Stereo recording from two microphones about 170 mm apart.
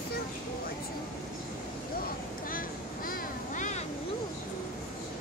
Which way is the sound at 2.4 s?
55° left (ahead or behind).